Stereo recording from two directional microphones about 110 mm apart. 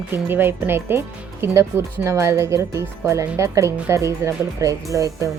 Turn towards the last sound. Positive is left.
turn(degrees=-30)  # may be behind; listen again after turning